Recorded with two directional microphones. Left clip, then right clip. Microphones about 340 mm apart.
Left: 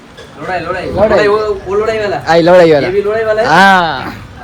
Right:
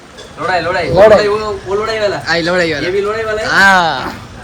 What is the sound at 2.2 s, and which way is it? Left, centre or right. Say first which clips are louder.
Speech: left 7 dB; centre.